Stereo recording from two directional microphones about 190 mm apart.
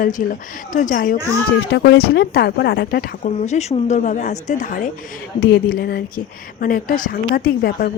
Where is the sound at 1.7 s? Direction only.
65° left (ahead or behind); by 4.9 s 40° left (ahead or behind).